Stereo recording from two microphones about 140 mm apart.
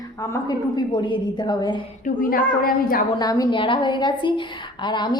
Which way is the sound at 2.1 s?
85° left.